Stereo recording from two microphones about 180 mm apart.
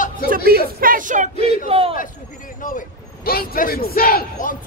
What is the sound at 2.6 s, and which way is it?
A man's voice, 55° left (ahead or behind).